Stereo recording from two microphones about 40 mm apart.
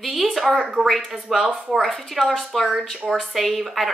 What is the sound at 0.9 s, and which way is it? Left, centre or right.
Speech, centre.